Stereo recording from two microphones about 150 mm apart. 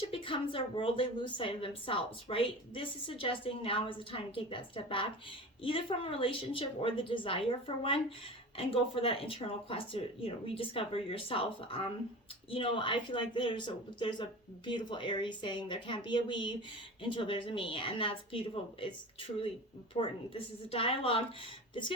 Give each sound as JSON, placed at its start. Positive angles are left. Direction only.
{"t": 0.1, "sound": "a woman's voice", "side_deg": 35}